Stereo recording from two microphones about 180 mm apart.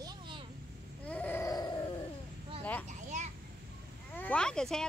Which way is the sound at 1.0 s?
10° left (ahead or behind).